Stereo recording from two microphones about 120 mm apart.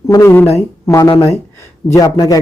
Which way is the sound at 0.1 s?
25° left (ahead or behind).